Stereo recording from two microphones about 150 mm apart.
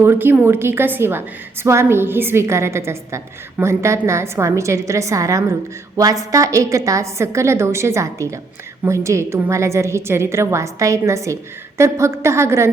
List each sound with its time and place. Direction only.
0.0 s a woman's voice: 15° right (ahead or behind)